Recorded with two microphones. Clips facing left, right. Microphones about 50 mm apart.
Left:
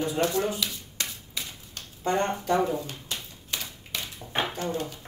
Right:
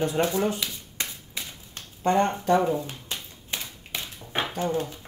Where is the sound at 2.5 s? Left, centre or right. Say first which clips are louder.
Right 3 dB; right.